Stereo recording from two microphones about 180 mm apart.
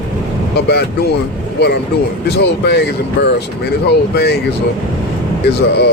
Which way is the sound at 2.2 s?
65° left (ahead or behind).